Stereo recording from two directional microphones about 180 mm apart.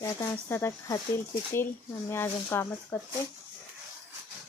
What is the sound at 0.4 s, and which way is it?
Speech, 15° left (ahead or behind).